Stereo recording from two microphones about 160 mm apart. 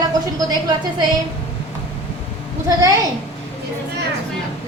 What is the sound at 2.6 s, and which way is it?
Speech, 20° right (ahead or behind).